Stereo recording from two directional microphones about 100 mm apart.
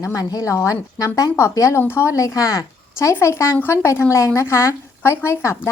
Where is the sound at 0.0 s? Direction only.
35° left (ahead or behind).